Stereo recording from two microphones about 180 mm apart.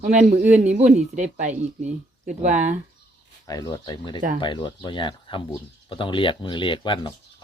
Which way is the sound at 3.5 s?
20° left (ahead or behind).